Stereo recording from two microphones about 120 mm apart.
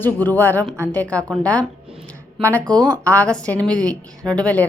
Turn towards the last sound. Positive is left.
turn(degrees=10)  # may be behind; listen again after turning